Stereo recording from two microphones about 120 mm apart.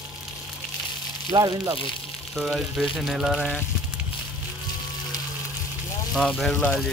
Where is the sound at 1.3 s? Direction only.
35° right (ahead or behind).